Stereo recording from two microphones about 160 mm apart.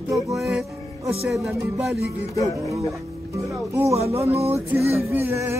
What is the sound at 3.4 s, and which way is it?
Speech, 20° right (ahead or behind).